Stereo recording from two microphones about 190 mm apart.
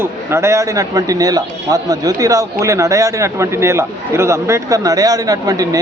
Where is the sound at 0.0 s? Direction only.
15° right (ahead or behind).